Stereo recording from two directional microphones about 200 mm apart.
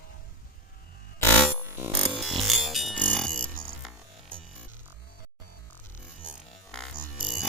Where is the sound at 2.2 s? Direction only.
Centre (ahead or behind).